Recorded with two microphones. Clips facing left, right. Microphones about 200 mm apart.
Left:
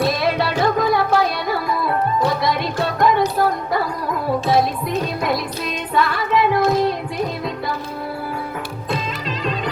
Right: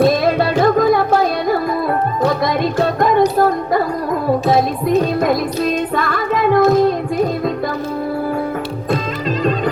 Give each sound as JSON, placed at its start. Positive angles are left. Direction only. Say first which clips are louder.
{"t": 0.0, "sound": "music", "louder": "right 6 dB", "side_deg": -50}
{"t": 5.2, "sound": "music", "louder": "right 6 dB", "side_deg": -50}